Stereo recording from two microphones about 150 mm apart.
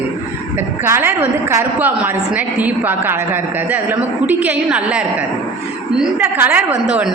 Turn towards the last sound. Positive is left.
turn(degrees=-10)  # may be behind; listen again after turning